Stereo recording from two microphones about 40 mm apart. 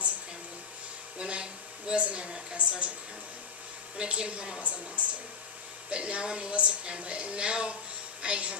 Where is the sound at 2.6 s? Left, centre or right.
Right.